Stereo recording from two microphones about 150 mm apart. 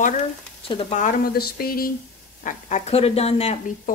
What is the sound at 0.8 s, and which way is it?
Speech, 60° left (ahead or behind).